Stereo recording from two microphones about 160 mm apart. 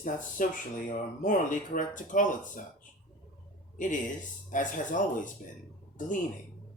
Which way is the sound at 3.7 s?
55° left (ahead or behind).